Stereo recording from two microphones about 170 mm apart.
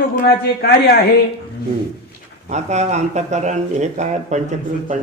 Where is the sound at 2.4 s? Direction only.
40° right (ahead or behind).